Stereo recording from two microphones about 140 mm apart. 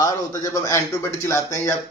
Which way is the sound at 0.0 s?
25° left (ahead or behind).